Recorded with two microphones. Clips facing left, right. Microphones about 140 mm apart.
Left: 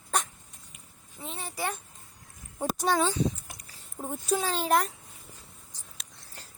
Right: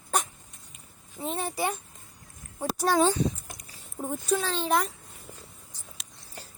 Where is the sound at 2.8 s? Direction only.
5° right (ahead or behind).